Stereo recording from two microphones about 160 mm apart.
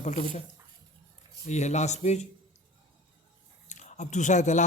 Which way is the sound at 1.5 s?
45° left (ahead or behind).